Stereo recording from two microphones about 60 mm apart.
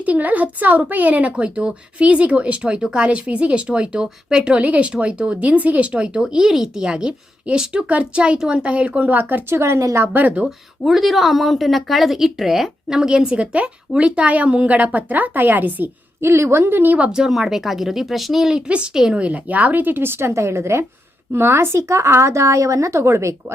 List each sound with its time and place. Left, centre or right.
0.0 s speech: right
6.2 s a woman's voice: centre; by 9.6 s right
9.6 s speech: right
10.1 s speech: right
10.8 s a woman's voice: centre; by 15.9 s right
16.2 s speech: right
17.0 s a woman's voice: centre; by 23.3 s right